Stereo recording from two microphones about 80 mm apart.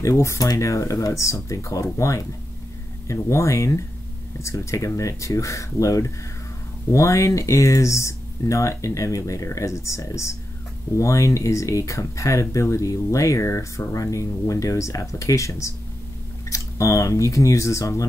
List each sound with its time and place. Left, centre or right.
0.0 s speech: left